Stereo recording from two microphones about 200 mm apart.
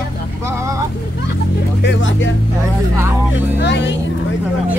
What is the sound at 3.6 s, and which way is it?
Speech, 60° left (ahead or behind).